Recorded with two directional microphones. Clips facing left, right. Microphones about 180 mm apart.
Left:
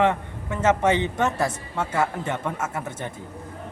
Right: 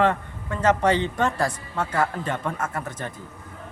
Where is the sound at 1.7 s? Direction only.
10° left (ahead or behind).